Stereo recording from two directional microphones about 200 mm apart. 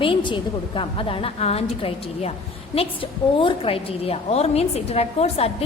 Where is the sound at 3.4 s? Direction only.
25° left (ahead or behind).